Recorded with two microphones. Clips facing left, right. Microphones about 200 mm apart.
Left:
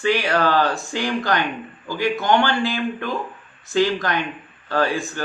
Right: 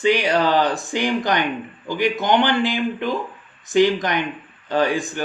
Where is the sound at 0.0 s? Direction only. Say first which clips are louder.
Right 2 dB; 15° right (ahead or behind).